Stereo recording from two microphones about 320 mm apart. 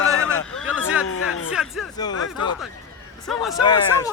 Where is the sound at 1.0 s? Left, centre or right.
Left.